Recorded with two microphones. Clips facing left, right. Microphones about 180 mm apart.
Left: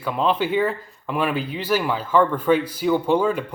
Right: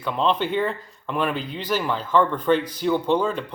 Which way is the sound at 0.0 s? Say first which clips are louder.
Left 1 dB; 5° left (ahead or behind).